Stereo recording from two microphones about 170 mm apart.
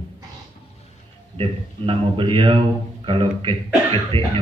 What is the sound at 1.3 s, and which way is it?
A man's voice, 30° right (ahead or behind).